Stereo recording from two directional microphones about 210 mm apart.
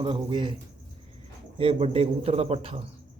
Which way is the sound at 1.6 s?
25° right (ahead or behind).